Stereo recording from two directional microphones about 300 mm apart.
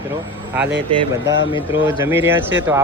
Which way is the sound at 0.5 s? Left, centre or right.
Centre.